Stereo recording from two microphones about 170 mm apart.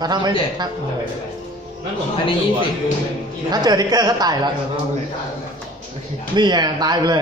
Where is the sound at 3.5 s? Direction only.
25° right (ahead or behind).